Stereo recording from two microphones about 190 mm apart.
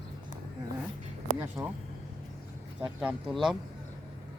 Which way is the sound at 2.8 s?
5° right (ahead or behind).